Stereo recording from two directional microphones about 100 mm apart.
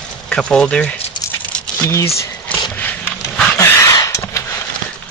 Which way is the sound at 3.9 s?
30° left (ahead or behind).